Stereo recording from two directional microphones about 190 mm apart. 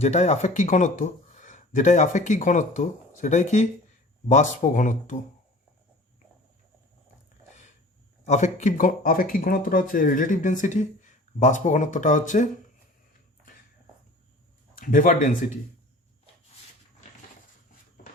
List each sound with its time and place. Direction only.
0.0 s speech: 35° left (ahead or behind)
8.2 s speech: 40° left (ahead or behind)
14.8 s speech: 45° left (ahead or behind)
18.0 s a sound: 50° left (ahead or behind)